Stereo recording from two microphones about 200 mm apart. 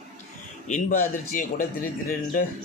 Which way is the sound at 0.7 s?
40° left (ahead or behind).